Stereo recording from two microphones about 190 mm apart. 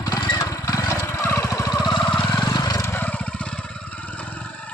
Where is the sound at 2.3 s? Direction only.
20° left (ahead or behind).